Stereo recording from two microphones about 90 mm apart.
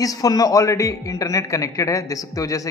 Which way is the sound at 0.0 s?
40° left (ahead or behind).